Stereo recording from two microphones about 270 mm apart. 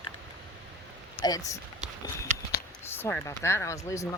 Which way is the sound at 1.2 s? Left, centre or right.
Centre.